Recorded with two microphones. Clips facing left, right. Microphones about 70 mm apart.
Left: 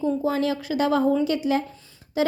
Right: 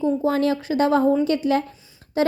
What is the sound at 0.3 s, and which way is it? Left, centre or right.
Speech, right.